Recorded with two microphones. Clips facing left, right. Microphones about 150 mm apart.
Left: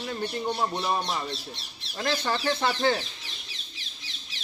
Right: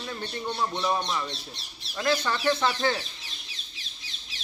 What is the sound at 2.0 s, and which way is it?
Speech, 30° left (ahead or behind).